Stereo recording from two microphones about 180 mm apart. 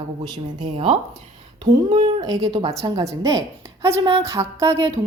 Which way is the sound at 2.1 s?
20° right (ahead or behind).